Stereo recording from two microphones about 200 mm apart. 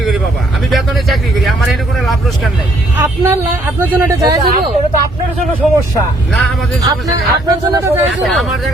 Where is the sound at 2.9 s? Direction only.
10° right (ahead or behind).